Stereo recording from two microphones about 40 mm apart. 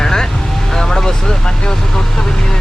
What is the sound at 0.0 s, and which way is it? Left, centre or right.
Vehicle, centre.